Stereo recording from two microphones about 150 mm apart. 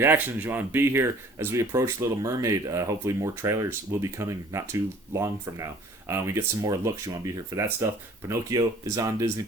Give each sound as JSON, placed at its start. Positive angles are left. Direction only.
{"t": 0.0, "sound": "speech", "side_deg": -15}